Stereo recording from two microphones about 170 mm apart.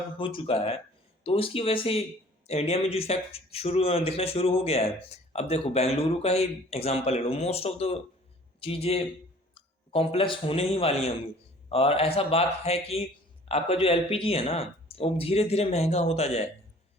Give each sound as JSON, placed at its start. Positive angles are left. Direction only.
{"t": 0.2, "sound": "a man's voice", "side_deg": 30}